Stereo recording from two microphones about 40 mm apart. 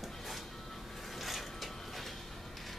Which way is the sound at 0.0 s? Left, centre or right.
Centre.